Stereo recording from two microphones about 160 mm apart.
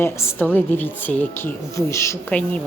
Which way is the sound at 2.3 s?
5° left (ahead or behind).